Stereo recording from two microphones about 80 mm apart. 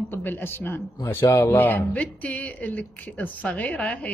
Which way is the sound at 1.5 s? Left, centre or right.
Left.